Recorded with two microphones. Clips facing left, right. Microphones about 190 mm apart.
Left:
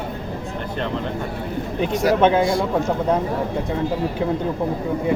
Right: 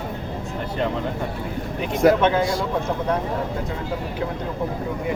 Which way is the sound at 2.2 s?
30° left (ahead or behind).